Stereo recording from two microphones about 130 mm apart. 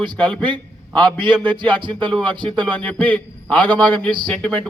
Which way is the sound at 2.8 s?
10° left (ahead or behind).